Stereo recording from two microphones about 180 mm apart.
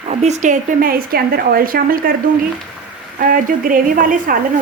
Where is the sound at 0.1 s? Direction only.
40° right (ahead or behind); by 2.0 s 55° right (ahead or behind).